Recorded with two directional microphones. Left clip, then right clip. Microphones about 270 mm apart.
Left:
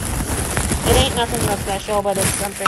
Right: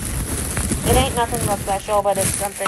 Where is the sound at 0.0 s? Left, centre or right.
Centre.